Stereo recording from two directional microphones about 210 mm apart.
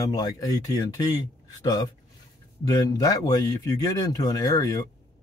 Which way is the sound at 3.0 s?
15° left (ahead or behind).